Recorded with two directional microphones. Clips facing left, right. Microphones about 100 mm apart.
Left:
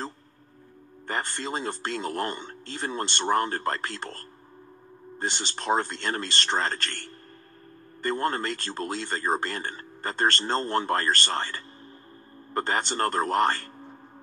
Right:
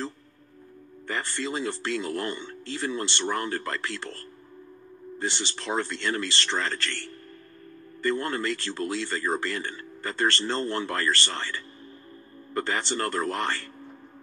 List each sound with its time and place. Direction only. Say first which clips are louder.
1.0 s speech: even; 45° left (ahead or behind)